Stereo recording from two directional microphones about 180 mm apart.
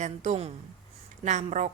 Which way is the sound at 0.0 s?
40° right (ahead or behind).